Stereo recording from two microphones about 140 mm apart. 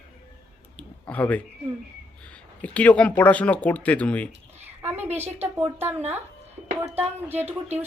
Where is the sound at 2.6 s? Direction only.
10° left (ahead or behind).